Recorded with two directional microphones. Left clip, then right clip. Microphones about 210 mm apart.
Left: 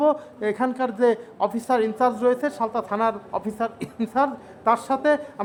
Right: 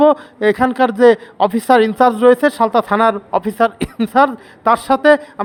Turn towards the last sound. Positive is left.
turn(degrees=-30)  # may be behind; listen again after turning